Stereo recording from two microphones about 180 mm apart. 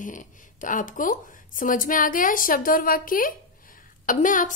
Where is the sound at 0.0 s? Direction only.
45° left (ahead or behind).